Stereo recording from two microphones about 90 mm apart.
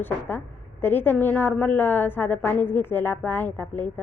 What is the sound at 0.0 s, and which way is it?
A woman's voice, 20° left (ahead or behind).